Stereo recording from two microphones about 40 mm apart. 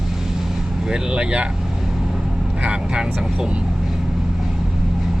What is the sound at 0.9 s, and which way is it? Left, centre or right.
Speech, centre.